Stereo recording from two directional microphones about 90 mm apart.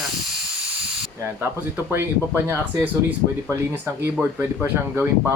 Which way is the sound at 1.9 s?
30° right (ahead or behind).